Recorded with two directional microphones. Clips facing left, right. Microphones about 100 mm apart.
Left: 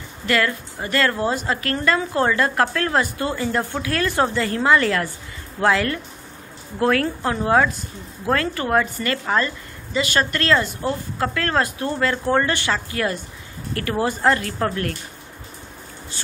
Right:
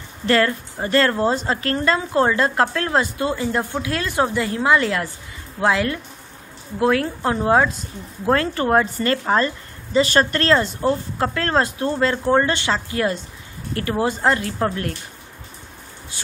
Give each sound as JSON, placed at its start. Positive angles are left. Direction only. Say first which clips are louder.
{"t": 0.3, "sound": "a woman's voice", "louder": "right 3 dB", "side_deg": -30}